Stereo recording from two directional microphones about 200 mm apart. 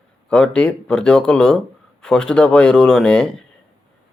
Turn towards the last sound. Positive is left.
turn(degrees=5)  # may be behind; listen again after turning